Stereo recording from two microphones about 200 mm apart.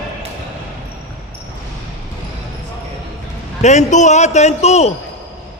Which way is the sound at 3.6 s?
35° left (ahead or behind).